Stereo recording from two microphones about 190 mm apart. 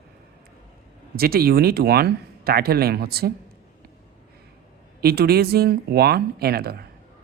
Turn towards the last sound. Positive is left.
turn(degrees=-55)  # may be behind; listen again after turning